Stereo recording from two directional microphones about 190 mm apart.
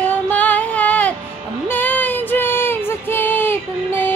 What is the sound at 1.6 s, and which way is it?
Child singing, 10° left (ahead or behind).